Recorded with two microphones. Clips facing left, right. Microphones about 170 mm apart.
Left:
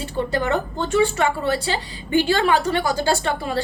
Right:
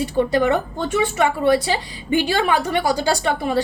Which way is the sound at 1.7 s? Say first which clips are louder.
Right 1 dB; 15° right (ahead or behind).